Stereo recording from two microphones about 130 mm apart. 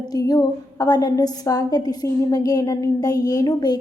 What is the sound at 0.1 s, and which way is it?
A woman's voice, 30° left (ahead or behind).